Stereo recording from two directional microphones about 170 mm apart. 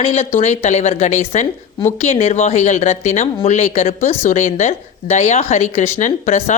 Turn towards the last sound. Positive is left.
turn(degrees=45)  # may be behind; listen again after turning